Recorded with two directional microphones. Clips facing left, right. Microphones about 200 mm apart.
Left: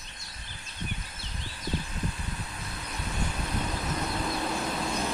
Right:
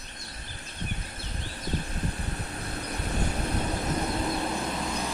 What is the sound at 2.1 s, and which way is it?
Vehicle, 40° right (ahead or behind).